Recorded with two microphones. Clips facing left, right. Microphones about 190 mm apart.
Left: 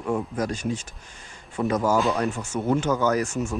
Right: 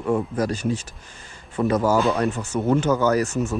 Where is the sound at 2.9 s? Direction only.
10° right (ahead or behind).